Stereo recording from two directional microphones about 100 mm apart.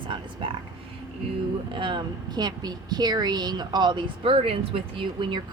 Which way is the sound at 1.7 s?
55° right (ahead or behind).